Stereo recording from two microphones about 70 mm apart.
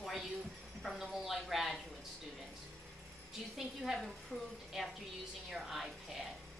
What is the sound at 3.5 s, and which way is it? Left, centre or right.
A woman's voice, centre.